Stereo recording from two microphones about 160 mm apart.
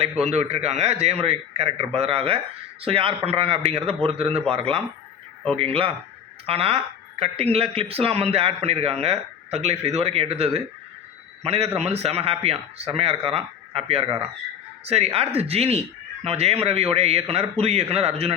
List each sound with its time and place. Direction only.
0.0 s speech: 40° right (ahead or behind)
5.5 s speech: 35° right (ahead or behind)